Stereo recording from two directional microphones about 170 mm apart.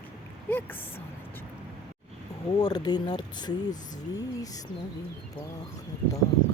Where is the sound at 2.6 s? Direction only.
25° left (ahead or behind).